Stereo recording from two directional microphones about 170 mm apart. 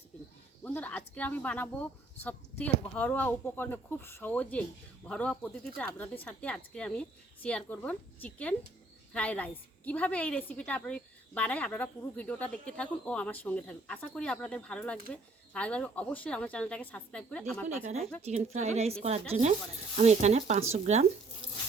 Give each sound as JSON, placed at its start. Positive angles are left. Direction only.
{"t": 0.6, "sound": "a woman's voice", "side_deg": 10}
{"t": 18.5, "sound": "speech", "side_deg": -40}